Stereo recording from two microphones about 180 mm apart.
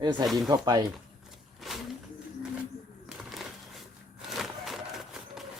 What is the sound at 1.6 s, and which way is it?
Bird, centre (ahead or behind).